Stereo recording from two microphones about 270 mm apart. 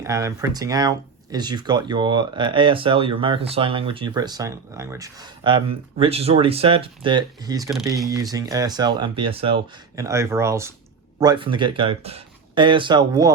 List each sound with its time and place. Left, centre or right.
0.0 s speech: centre